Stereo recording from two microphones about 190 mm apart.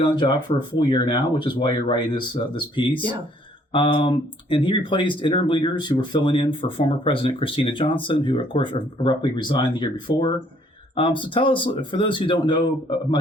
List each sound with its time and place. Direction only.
0.0 s speech: 25° left (ahead or behind)